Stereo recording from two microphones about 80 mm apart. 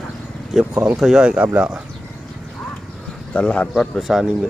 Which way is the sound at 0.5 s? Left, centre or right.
Centre.